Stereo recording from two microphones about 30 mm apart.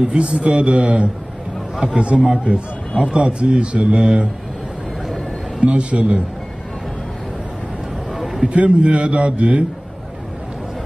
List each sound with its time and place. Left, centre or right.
0.0 s speech: right
2.0 s a man's voice: right
5.6 s a man's voice: right
8.1 s a sound: centre
8.5 s speech: right